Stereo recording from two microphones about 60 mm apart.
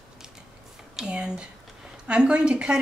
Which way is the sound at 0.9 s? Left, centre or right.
Centre.